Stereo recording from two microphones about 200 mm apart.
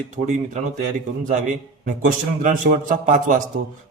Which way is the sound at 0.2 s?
50° right (ahead or behind).